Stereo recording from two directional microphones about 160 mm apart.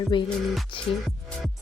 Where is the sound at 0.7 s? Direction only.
30° left (ahead or behind).